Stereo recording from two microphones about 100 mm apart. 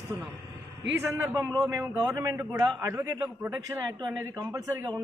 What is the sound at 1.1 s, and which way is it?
A man's voice, 25° right (ahead or behind).